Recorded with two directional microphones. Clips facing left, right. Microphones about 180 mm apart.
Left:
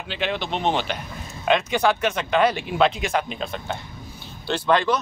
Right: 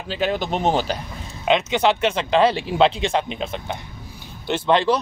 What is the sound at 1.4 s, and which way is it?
Speech, 20° right (ahead or behind).